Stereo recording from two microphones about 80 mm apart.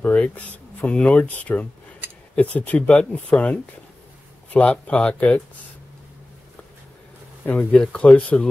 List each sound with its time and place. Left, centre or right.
0.0 s speech: left
7.4 s speech: centre